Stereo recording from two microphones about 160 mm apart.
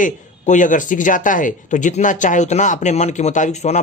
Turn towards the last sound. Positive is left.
turn(degrees=45)  # may be behind; listen again after turning